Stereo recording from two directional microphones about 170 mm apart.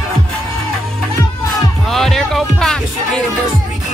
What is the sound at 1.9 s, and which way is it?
Music, centre (ahead or behind).